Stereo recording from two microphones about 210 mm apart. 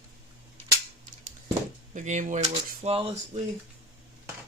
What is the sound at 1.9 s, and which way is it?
Speech, 35° right (ahead or behind).